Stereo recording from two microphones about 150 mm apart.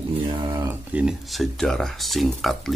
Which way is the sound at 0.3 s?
30° right (ahead or behind).